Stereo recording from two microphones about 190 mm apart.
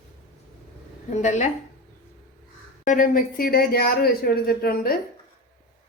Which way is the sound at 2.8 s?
45° left (ahead or behind).